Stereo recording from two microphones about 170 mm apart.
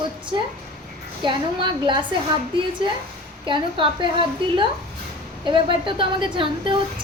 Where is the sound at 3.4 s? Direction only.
30° right (ahead or behind).